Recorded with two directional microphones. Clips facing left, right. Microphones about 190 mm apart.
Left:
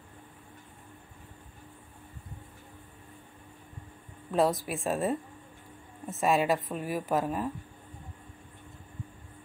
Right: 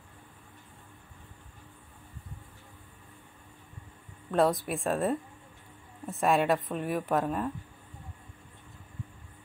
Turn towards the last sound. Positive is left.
turn(degrees=5)  # may be behind; listen again after turning